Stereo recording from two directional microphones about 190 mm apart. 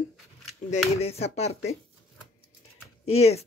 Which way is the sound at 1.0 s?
35° left (ahead or behind).